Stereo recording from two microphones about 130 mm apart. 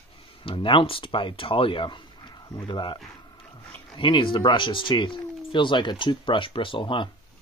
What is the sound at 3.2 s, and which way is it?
Pig, 35° left (ahead or behind).